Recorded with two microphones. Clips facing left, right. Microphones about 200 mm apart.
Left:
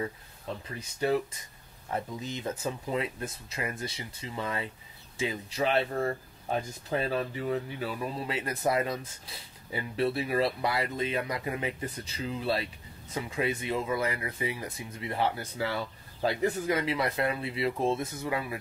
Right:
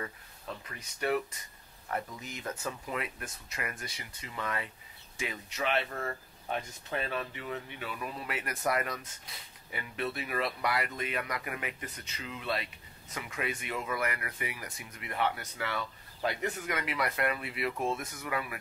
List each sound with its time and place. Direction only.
0.0 s speech: 30° left (ahead or behind)